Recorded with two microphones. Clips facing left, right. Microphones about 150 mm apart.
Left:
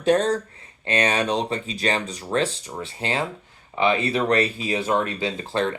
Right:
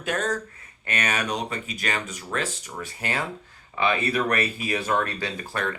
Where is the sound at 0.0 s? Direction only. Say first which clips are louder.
Left 8 dB; 35° left (ahead or behind).